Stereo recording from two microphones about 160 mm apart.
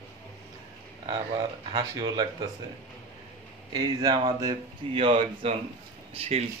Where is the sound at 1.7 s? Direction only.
25° right (ahead or behind).